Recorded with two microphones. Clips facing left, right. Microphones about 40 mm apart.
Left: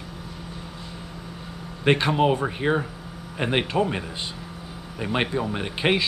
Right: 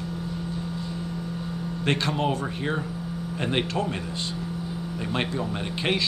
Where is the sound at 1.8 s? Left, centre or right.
Centre.